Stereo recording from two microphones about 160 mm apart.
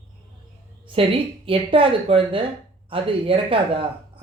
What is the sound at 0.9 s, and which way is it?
Speech, 35° right (ahead or behind).